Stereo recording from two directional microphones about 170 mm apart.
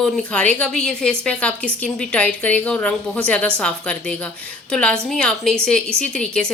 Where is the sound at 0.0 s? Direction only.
5° left (ahead or behind).